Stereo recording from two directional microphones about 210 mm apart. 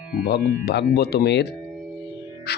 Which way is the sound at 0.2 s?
50° left (ahead or behind).